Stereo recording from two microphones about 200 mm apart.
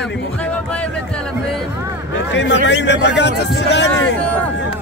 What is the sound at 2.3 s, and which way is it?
A man's voice, 60° left (ahead or behind).